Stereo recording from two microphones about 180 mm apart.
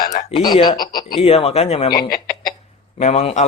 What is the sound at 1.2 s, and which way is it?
Speech, 35° left (ahead or behind).